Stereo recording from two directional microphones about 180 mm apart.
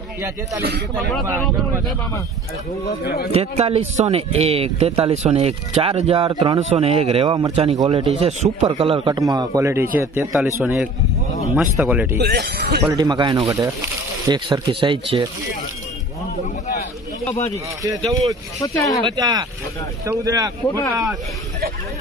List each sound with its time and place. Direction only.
3.0 s speech: 60° left (ahead or behind)
3.3 s a man's voice: 35° right (ahead or behind); by 12.2 s 10° right (ahead or behind)
12.2 s speech: 65° right (ahead or behind)
12.8 s speech: 20° right (ahead or behind)
18.6 s speech: 20° left (ahead or behind)
19.0 s speech: 25° right (ahead or behind)